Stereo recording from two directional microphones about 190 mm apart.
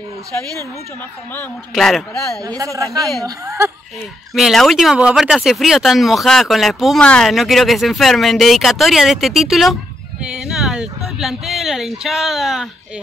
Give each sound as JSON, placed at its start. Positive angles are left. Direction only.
{"t": 1.3, "sound": "speech", "side_deg": 5}
{"t": 2.4, "sound": "a man's voice", "side_deg": -20}
{"t": 4.3, "sound": "speech", "side_deg": 0}